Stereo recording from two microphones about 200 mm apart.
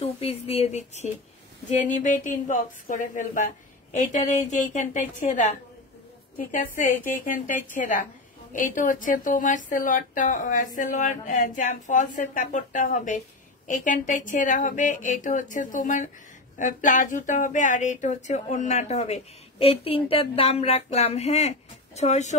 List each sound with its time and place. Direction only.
0.0 s speech: 30° left (ahead or behind)